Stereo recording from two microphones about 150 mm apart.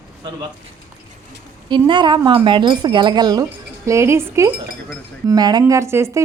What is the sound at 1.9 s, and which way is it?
Speech, 30° right (ahead or behind).